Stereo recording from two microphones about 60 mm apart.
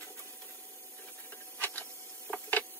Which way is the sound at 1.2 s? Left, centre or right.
Left.